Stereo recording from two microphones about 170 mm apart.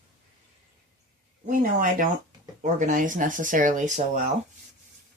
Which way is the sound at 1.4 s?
50° right (ahead or behind).